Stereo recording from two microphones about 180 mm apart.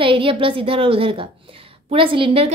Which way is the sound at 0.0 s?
30° right (ahead or behind).